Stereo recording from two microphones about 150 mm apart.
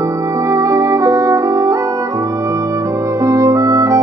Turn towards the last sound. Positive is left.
turn(degrees=-20)  # may be behind; listen again after turning